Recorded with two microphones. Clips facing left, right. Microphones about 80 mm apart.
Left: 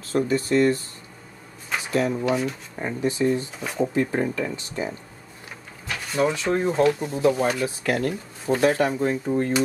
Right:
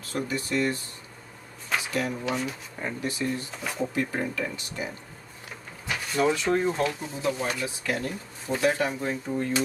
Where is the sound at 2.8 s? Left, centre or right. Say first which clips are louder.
Left 7 dB; left.